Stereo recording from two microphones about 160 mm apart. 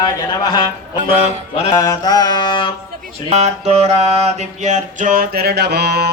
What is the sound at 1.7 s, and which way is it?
Music, 20° left (ahead or behind).